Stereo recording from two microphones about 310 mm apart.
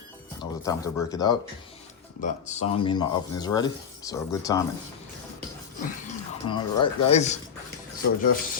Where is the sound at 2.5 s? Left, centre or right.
Centre.